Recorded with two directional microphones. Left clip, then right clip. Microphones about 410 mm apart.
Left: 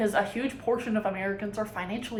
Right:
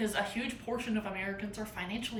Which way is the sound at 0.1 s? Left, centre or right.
Centre.